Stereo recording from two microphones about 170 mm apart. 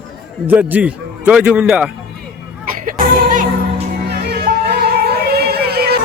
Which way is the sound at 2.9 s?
50° right (ahead or behind).